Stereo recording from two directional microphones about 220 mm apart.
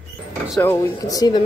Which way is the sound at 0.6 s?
10° left (ahead or behind).